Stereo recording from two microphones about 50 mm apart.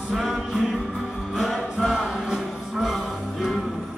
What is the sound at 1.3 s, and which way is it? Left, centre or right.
Music, centre.